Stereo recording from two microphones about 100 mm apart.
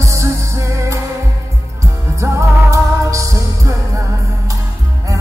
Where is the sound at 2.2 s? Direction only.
30° right (ahead or behind).